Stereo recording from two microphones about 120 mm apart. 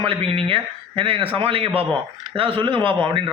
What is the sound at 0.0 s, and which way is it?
A man's voice, 50° right (ahead or behind).